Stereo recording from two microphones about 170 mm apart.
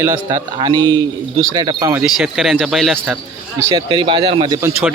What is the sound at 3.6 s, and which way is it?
Speech, 20° right (ahead or behind).